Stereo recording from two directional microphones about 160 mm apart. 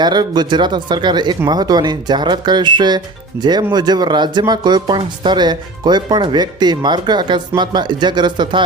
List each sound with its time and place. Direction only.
0.0 s speech: 25° right (ahead or behind)